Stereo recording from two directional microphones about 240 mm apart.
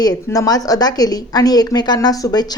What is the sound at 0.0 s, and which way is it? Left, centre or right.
Speech, centre.